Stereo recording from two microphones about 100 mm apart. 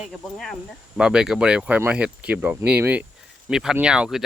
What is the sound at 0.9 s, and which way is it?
Speech, 5° right (ahead or behind).